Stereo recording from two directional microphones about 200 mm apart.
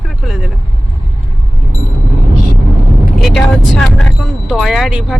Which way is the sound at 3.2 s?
Centre (ahead or behind).